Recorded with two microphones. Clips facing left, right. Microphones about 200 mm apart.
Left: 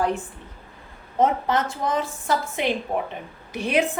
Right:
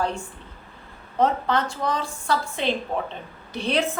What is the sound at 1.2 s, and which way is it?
A woman's voice, 20° left (ahead or behind).